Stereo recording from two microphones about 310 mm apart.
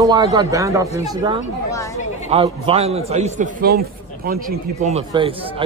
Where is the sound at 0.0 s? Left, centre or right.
Centre.